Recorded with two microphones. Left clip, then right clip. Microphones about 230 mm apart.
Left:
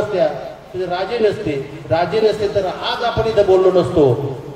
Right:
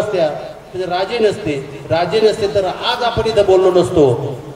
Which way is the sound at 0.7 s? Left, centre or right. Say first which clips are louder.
Right 2 dB; right.